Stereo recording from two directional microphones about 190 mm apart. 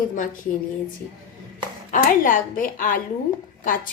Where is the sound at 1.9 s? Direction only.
45° left (ahead or behind).